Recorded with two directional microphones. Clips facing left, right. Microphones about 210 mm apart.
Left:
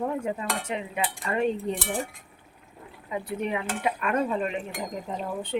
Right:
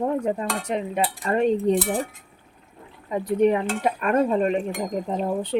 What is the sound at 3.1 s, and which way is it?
Cutlery, 40° right (ahead or behind).